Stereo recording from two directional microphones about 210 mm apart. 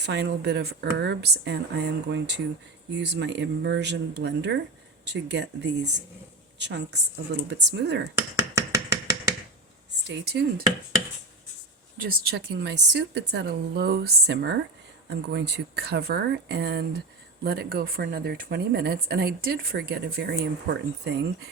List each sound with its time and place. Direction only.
0.0 s speech: 55° right (ahead or behind)
8.1 s a sound: 15° right (ahead or behind)
10.1 s speech: 50° right (ahead or behind)
11.9 s speech: 45° right (ahead or behind)